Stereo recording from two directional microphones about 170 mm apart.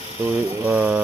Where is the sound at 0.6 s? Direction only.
10° right (ahead or behind).